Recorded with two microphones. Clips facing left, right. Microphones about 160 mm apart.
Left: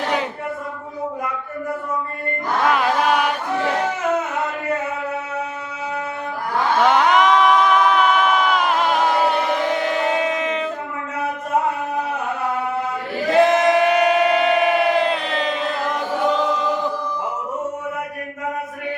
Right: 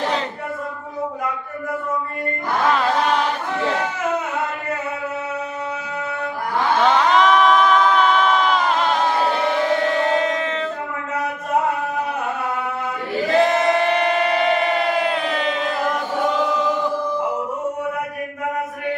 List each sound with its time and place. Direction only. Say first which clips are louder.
2.7 s chant: left 1 dB; 10° left (ahead or behind)
6.8 s a sound: left 1 dB; 15° left (ahead or behind)
9.7 s battle cry: right 1 dB; 10° left (ahead or behind)
13.4 s chant: left 4 dB; 20° left (ahead or behind); by 15.7 s centre (ahead or behind)